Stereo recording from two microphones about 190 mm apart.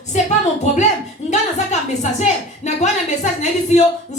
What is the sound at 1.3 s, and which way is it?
A woman's voice, 40° left (ahead or behind).